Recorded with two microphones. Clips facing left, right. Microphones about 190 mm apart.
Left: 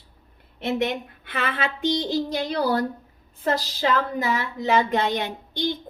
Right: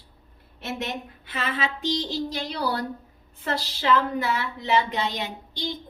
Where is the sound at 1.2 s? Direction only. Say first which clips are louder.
Left 1 dB; 60° left (ahead or behind).